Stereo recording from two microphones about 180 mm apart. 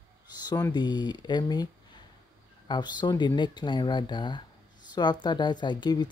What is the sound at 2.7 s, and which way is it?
Speech, 25° left (ahead or behind).